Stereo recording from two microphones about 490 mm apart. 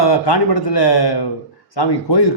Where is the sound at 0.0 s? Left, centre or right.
Left.